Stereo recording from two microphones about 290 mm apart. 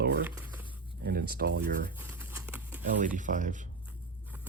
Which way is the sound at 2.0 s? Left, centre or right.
Centre.